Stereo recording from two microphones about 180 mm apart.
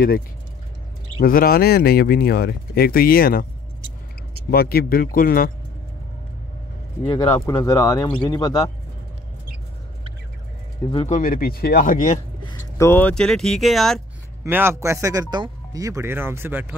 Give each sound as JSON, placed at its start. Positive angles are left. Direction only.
{"t": 1.2, "sound": "speech", "side_deg": 55}
{"t": 4.5, "sound": "speech", "side_deg": 55}
{"t": 7.3, "sound": "speech", "side_deg": 15}
{"t": 11.1, "sound": "speech", "side_deg": 50}
{"t": 12.4, "sound": "speech", "side_deg": 20}
{"t": 14.4, "sound": "speech", "side_deg": -15}